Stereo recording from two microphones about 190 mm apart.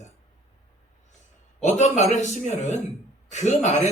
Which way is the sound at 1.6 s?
35° left (ahead or behind).